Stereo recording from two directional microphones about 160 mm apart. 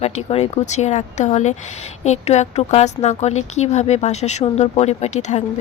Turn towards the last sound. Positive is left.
turn(degrees=45)  # may be behind; listen again after turning